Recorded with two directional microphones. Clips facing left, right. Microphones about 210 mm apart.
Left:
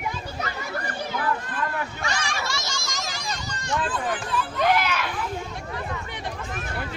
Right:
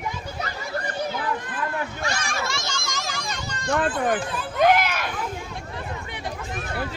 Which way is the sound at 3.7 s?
55° right (ahead or behind).